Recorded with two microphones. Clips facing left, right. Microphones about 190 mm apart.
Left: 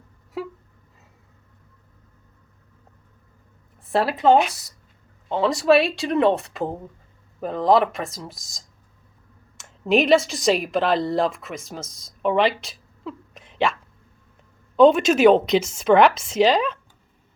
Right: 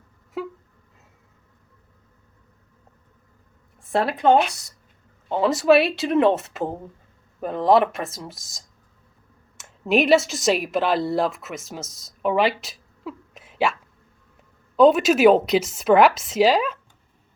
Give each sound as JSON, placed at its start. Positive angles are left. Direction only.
{"t": 3.9, "sound": "a woman's voice", "side_deg": 0}
{"t": 14.8, "sound": "a woman's voice", "side_deg": -5}